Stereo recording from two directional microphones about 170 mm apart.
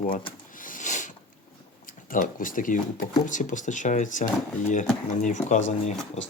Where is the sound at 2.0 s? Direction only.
50° left (ahead or behind).